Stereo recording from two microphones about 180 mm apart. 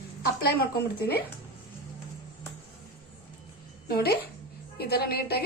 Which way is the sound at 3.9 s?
60° left (ahead or behind).